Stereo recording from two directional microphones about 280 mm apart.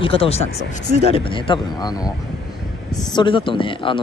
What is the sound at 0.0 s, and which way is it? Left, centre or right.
Speech, centre.